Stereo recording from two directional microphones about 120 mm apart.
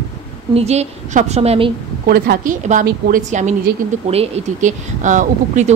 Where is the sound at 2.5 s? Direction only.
90° right.